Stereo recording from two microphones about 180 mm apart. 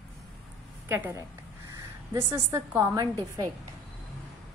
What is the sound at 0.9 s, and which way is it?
A woman's voice, 15° right (ahead or behind).